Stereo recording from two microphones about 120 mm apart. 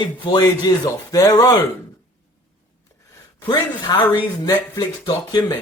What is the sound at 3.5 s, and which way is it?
Speech, 35° left (ahead or behind).